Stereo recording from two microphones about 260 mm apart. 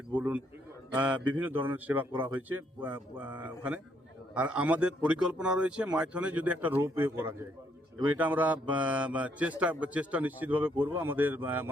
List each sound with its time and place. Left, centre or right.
0.2 s speech: centre